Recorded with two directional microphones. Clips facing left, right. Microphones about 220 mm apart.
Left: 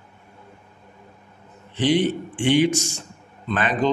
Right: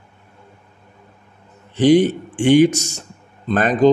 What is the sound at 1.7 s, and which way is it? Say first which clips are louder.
Speech: right 7 dB; 45° right (ahead or behind).